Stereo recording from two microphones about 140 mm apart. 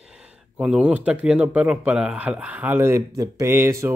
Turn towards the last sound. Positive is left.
turn(degrees=-20)  # may be behind; listen again after turning